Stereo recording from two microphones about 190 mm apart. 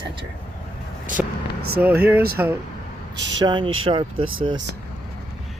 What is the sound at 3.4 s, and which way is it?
Speech, 25° right (ahead or behind).